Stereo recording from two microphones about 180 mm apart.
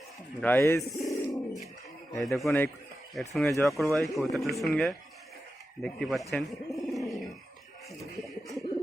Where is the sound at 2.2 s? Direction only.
Centre (ahead or behind).